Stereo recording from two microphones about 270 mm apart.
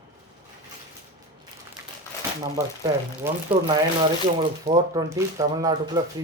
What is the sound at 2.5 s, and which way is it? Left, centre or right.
Speech, centre.